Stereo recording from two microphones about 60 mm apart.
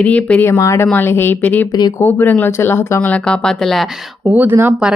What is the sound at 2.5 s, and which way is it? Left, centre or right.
Speech, left.